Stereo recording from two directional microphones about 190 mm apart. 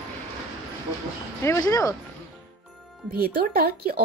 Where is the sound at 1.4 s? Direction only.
15° left (ahead or behind).